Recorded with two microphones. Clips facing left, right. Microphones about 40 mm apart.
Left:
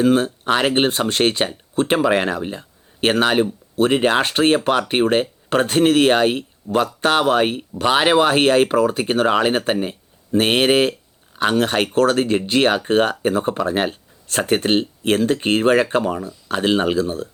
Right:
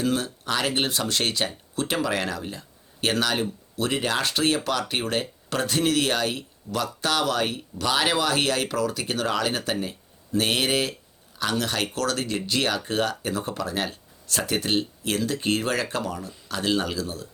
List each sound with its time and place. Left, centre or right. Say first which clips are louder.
0.0 s speech: left 9 dB; left